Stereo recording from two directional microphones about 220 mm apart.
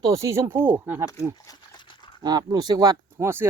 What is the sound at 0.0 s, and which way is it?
Speech, 15° right (ahead or behind).